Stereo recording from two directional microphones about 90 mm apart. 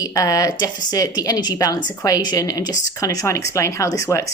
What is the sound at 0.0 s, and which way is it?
A woman's voice, 40° left (ahead or behind).